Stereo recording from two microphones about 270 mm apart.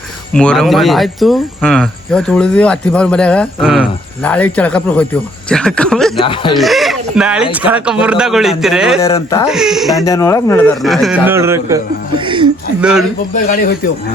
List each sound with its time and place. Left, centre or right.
0.3 s speech: centre
6.1 s speech: centre
6.6 s speech: centre
9.0 s speech: centre
9.5 s speech: centre
10.1 s speech: centre
12.8 s speech: centre
13.3 s speech: left